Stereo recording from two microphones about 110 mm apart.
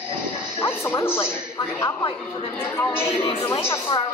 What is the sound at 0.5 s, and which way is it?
Speech, 25° left (ahead or behind).